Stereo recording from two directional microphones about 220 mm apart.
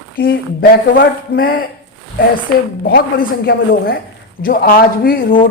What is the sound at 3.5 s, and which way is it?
Speech, 45° left (ahead or behind).